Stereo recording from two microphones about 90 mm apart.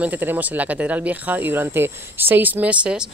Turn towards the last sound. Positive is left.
turn(degrees=-10)  # may be behind; listen again after turning